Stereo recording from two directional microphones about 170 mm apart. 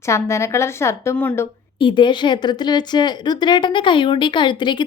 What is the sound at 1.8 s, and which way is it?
A woman's voice, 30° left (ahead or behind).